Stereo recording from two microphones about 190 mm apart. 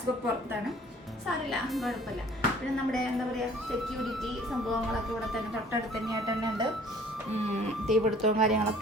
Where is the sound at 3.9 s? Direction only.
Centre (ahead or behind).